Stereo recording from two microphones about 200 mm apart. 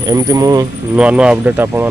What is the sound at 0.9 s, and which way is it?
Speech, 5° right (ahead or behind).